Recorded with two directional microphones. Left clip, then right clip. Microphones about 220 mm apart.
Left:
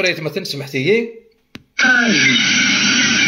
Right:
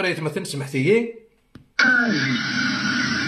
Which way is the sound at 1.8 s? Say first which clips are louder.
Left 5 dB; 55° left (ahead or behind).